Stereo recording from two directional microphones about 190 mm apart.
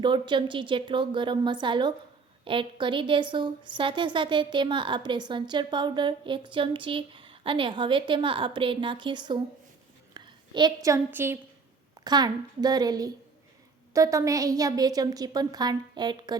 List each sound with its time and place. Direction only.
0.0 s a woman's voice: 25° right (ahead or behind)
10.2 s a sound: 25° right (ahead or behind)
10.8 s a woman's voice: 15° right (ahead or behind)